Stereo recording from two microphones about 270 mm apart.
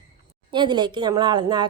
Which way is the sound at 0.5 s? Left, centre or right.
Centre.